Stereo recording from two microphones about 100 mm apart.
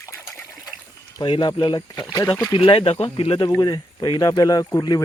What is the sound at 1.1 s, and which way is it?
Speech, 50° left (ahead or behind).